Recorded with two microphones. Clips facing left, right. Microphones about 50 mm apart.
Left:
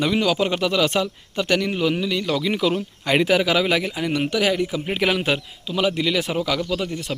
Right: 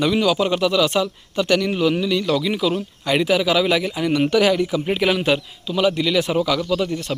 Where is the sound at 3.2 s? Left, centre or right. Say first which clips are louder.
Right 3 dB; left.